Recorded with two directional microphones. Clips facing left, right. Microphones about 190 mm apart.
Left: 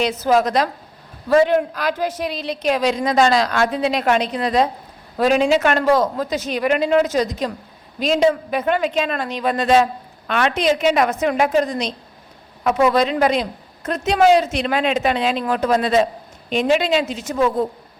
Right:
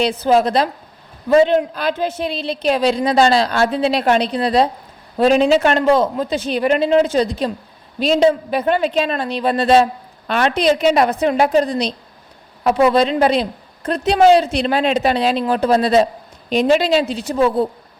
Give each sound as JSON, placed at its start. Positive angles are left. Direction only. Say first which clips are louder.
{"t": 0.0, "sound": "a woman's voice", "louder": "right 2 dB", "side_deg": -30}